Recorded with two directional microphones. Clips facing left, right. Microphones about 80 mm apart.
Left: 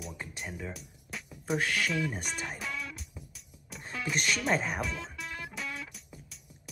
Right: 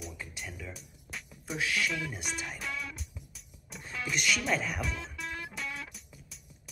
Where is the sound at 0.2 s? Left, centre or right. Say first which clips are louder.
Left 3 dB; left.